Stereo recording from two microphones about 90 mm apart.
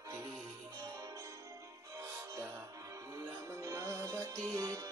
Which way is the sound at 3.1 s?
40° right (ahead or behind).